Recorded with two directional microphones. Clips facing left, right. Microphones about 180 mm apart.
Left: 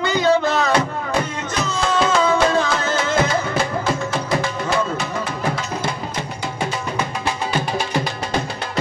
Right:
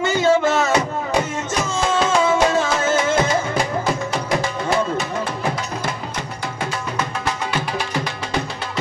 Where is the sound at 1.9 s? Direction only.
25° right (ahead or behind).